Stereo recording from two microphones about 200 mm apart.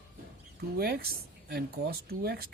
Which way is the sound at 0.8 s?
50° right (ahead or behind).